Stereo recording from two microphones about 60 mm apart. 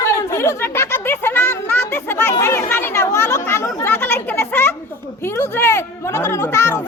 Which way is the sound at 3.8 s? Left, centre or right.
Left.